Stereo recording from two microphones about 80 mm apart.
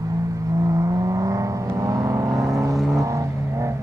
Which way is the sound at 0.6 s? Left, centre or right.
Right.